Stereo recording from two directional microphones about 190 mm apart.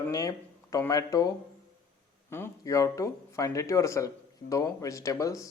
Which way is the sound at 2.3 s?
15° left (ahead or behind).